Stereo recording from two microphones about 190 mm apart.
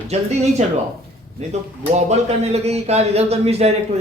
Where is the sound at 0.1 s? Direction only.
35° right (ahead or behind).